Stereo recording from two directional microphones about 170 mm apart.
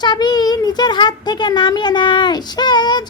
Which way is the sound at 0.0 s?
25° left (ahead or behind).